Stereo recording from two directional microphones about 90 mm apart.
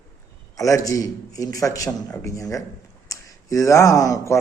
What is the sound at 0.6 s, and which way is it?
Speech, 40° left (ahead or behind).